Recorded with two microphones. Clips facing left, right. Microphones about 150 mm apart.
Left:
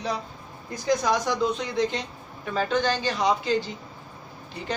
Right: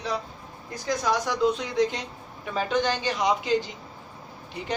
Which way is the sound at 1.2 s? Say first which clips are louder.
Right 1 dB; 10° right (ahead or behind).